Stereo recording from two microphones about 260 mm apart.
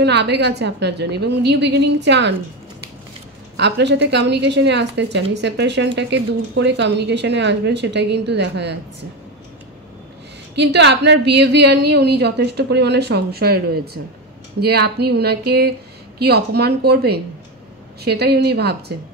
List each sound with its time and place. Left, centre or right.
0.0 s a woman's voice: right
3.5 s a woman's voice: right
10.5 s a woman's voice: right